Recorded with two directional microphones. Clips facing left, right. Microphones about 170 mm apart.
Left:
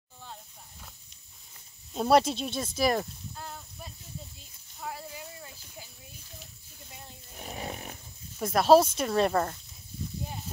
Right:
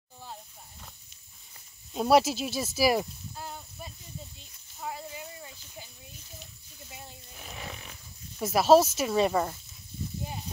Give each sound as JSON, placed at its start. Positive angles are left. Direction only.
{"t": 2.0, "sound": "speech", "side_deg": -5}
{"t": 4.4, "sound": "a sound", "side_deg": 0}
{"t": 6.9, "sound": "wild animals", "side_deg": -5}
{"t": 7.3, "sound": "snoring", "side_deg": 40}
{"t": 8.4, "sound": "speech", "side_deg": 0}